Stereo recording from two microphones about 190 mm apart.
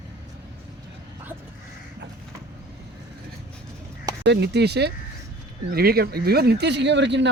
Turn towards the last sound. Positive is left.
turn(degrees=-65)  # may be behind; listen again after turning